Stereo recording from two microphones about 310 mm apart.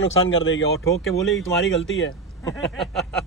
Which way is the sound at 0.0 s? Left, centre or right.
Left.